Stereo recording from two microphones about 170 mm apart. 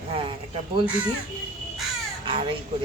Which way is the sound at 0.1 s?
35° right (ahead or behind).